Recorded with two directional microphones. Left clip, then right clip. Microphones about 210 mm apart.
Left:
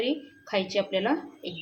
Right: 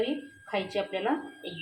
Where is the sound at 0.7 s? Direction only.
30° left (ahead or behind).